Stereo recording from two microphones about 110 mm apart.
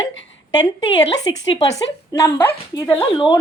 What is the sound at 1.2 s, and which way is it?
A woman's voice, 35° left (ahead or behind).